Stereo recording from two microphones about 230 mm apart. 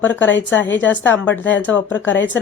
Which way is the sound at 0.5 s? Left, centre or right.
Left.